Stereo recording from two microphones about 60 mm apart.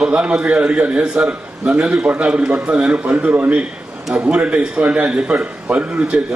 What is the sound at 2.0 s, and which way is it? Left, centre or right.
Speech, centre.